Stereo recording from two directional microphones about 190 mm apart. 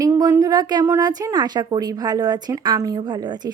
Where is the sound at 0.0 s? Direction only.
20° right (ahead or behind).